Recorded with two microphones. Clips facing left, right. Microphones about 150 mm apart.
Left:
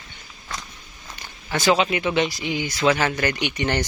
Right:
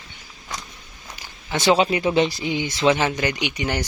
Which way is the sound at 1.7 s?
30° right (ahead or behind).